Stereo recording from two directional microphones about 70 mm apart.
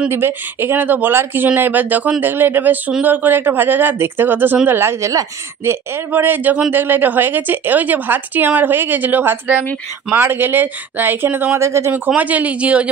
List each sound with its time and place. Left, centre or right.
0.1 s speech: right
11.5 s speech: right
12.2 s speech: right